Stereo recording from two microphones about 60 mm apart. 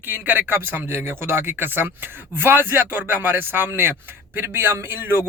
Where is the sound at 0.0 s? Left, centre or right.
Right.